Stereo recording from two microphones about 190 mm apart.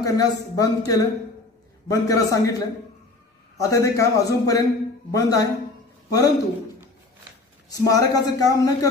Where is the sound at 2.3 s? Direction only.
20° left (ahead or behind).